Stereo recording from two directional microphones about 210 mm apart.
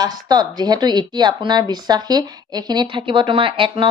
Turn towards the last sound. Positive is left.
turn(degrees=-25)  # may be behind; listen again after turning